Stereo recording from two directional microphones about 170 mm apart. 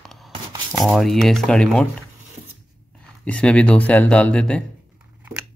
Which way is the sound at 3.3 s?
5° left (ahead or behind).